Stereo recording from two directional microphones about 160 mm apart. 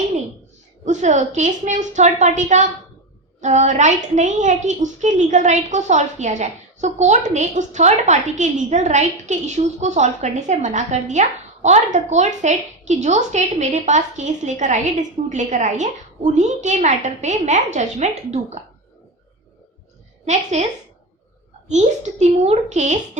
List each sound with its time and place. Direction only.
0.9 s a woman's voice: 50° right (ahead or behind)
20.2 s a woman's voice: 45° right (ahead or behind)
21.7 s a woman's voice: 45° right (ahead or behind)